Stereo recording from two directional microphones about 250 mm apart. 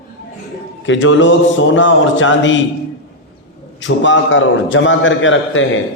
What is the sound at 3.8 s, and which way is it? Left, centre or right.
A man's voice, left.